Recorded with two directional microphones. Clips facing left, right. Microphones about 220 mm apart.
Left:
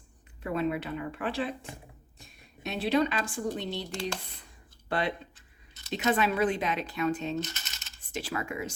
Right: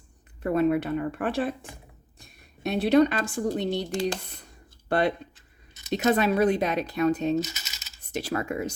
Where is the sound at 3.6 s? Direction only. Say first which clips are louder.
Right 8 dB; 60° right (ahead or behind).